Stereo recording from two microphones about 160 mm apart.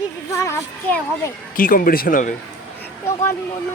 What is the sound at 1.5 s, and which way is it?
Speech, 60° left (ahead or behind).